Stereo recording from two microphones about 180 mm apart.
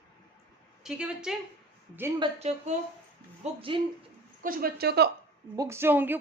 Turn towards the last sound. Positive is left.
turn(degrees=-10)  # may be behind; listen again after turning